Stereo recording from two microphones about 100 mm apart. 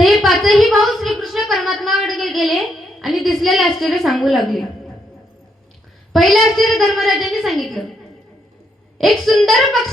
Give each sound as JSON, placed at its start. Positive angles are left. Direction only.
{"t": 0.0, "sound": "a sound", "side_deg": 0}
{"t": 6.1, "sound": "a woman's voice", "side_deg": 0}
{"t": 9.0, "sound": "a woman's voice", "side_deg": 0}